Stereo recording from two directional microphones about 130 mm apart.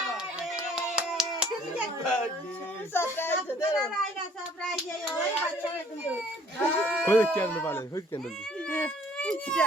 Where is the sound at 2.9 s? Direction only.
15° left (ahead or behind).